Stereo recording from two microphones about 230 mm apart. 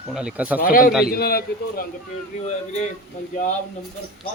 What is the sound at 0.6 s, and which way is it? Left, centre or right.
Speech, left.